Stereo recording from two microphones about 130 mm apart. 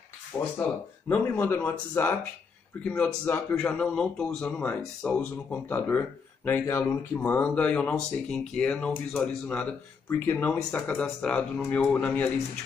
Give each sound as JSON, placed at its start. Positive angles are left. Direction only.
{"t": 0.6, "sound": "speech", "side_deg": 20}